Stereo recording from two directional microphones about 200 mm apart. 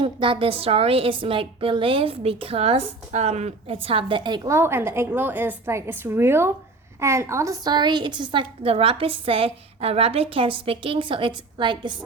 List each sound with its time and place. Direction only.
0.0 s a woman's voice: 25° right (ahead or behind)